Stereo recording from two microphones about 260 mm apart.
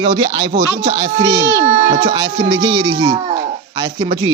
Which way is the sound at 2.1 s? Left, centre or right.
Centre.